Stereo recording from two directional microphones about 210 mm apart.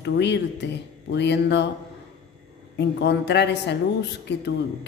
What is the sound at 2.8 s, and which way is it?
Speech, 55° left (ahead or behind).